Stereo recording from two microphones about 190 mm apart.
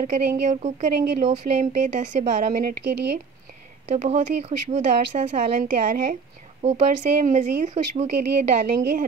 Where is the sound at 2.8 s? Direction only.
65° right (ahead or behind).